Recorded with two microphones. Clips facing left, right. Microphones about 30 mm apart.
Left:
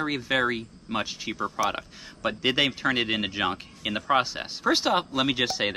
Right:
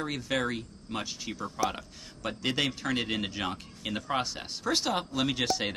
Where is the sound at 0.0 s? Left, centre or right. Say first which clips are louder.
Left 6 dB; left.